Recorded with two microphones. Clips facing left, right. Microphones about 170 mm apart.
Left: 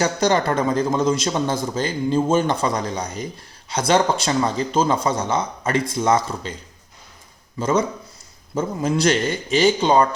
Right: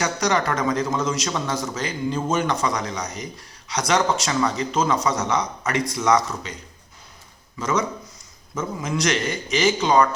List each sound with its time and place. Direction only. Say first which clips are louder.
0.0 s a man's voice: left 3 dB; 30° left (ahead or behind)
7.6 s a man's voice: left 4 dB; 30° left (ahead or behind)